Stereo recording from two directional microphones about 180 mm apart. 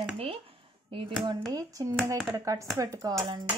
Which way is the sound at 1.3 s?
20° right (ahead or behind).